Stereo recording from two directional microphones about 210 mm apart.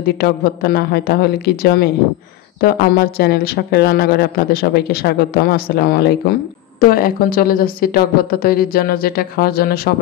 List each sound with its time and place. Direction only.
0.0 s speech: 50° left (ahead or behind)